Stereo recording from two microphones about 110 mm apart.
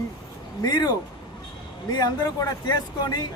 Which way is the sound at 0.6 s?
40° left (ahead or behind).